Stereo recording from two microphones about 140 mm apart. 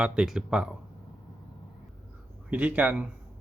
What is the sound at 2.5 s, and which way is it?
Speech, 10° right (ahead or behind).